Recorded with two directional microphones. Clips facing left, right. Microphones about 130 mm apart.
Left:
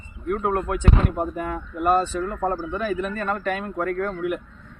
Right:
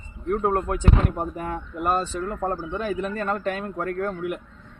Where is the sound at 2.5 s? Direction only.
25° right (ahead or behind).